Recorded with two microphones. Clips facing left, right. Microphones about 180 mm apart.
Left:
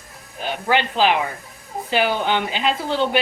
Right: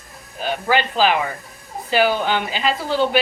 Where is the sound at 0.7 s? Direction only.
20° left (ahead or behind).